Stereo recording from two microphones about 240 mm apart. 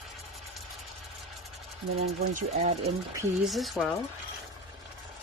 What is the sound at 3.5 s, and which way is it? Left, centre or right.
Speech, centre.